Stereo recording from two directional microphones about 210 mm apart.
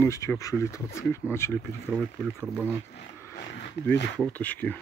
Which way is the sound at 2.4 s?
5° right (ahead or behind).